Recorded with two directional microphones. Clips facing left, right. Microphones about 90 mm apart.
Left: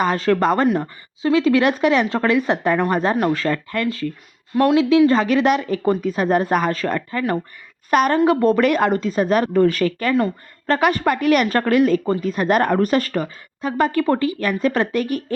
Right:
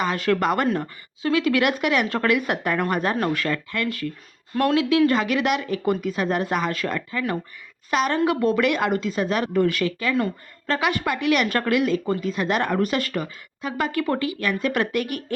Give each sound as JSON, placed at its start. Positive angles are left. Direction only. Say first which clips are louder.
{"t": 0.0, "sound": "a woman's voice", "louder": "left 4 dB", "side_deg": 35}